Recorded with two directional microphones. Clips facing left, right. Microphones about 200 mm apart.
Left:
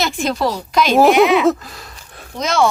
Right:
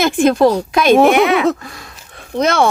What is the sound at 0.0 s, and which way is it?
Speech, 50° right (ahead or behind).